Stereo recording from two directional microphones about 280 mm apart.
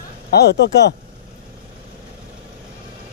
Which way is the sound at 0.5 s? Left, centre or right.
Left.